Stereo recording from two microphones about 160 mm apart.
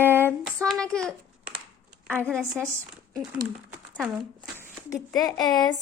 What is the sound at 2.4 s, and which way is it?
Speech, 15° right (ahead or behind).